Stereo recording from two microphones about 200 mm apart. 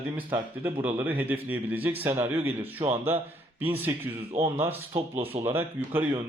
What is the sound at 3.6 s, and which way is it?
Speech, 10° right (ahead or behind).